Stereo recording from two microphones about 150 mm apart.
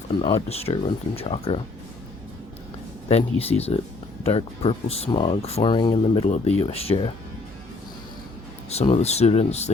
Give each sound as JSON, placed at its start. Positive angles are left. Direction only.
{"t": 0.1, "sound": "speech", "side_deg": 25}
{"t": 0.4, "sound": "speech", "side_deg": 45}
{"t": 3.1, "sound": "speech", "side_deg": 45}
{"t": 6.2, "sound": "speech", "side_deg": 50}
{"t": 8.7, "sound": "speech", "side_deg": 45}